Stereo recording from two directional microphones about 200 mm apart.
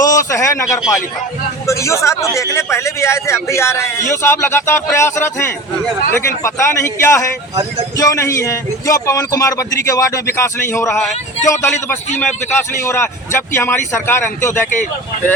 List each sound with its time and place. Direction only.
0.0 s a man's voice: 15° left (ahead or behind)